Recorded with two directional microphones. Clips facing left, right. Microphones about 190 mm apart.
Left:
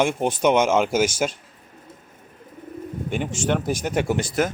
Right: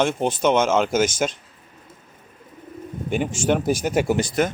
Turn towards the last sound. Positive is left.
turn(degrees=5)  # may be behind; listen again after turning